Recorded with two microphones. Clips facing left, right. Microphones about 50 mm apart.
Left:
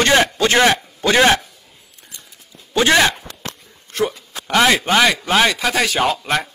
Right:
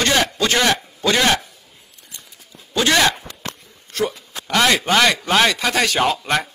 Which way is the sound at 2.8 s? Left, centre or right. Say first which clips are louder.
Left 2 dB; left.